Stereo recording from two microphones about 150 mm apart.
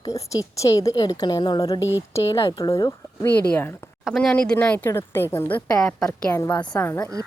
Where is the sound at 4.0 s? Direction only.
Centre (ahead or behind).